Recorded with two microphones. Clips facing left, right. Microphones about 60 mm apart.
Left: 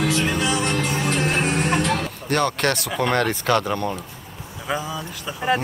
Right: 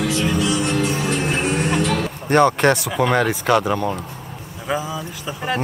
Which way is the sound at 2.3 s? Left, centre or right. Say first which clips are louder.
Right 7 dB; centre.